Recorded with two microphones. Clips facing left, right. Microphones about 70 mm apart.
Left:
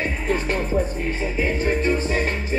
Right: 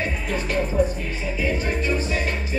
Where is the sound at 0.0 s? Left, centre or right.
Left.